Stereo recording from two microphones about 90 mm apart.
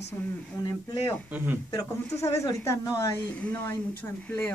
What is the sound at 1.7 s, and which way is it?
Speech, 35° left (ahead or behind).